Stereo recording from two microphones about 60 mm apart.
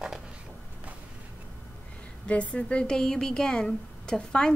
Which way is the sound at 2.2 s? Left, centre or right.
Left.